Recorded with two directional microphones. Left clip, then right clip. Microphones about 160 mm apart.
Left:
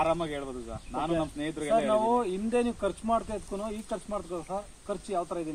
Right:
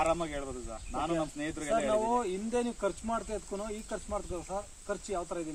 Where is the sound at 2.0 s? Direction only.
15° left (ahead or behind).